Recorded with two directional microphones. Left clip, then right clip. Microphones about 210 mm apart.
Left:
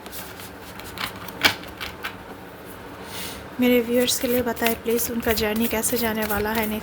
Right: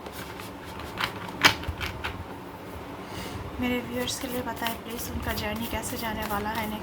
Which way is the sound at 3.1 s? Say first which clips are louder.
Left 8 dB; 50° left (ahead or behind).